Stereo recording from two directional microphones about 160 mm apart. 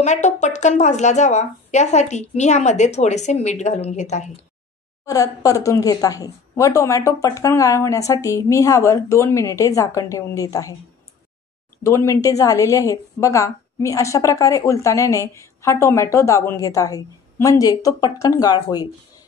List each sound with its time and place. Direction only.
0.0 s speech: 45° left (ahead or behind)
5.0 s a woman's voice: 20° left (ahead or behind)
11.8 s a woman's voice: 20° left (ahead or behind)